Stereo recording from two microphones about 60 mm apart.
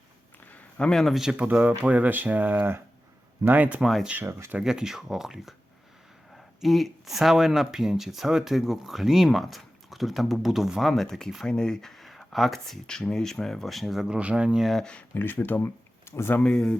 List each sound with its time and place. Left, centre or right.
0.5 s a sound: centre
1.1 s speech: centre
1.4 s speech: right
4.3 s speech: right
4.5 s speech: centre
14.1 s speech: centre
14.6 s speech: centre
15.1 s speech: left
16.0 s speech: left
16.4 s speech: centre